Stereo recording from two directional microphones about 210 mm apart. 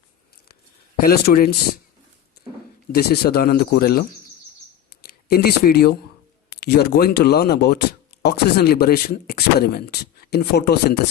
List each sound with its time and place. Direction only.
1.0 s speech: 50° left (ahead or behind)
2.9 s speech: 50° left (ahead or behind)
5.0 s speech: 50° left (ahead or behind)